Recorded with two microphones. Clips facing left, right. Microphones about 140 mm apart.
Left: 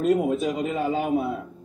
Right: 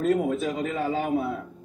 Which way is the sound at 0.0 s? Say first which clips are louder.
Left 2 dB; 20° left (ahead or behind).